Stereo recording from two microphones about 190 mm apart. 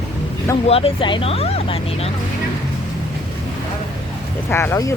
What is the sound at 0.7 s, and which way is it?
Speech, 30° left (ahead or behind).